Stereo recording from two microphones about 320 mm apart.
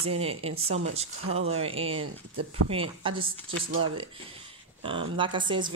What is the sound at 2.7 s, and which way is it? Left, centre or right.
Speech, centre.